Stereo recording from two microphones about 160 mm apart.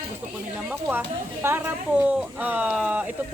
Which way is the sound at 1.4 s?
15° right (ahead or behind).